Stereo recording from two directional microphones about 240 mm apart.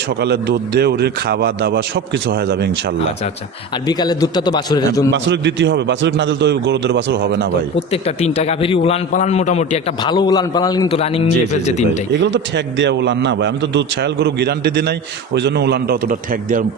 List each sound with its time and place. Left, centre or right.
0.2 s a man's voice: right
3.8 s a man's voice: centre
5.1 s a man's voice: right
8.0 s a man's voice: left
12.2 s a man's voice: right